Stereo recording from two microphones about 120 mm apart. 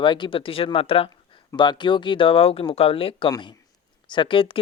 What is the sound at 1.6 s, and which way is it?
Speech, 40° left (ahead or behind).